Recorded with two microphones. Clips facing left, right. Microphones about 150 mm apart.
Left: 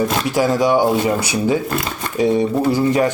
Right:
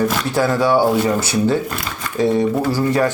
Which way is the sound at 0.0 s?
20° left (ahead or behind).